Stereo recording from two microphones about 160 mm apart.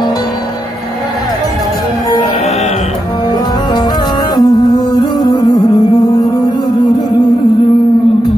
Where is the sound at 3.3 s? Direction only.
25° left (ahead or behind).